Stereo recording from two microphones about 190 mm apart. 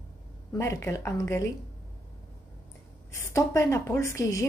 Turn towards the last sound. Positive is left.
turn(degrees=15)  # may be behind; listen again after turning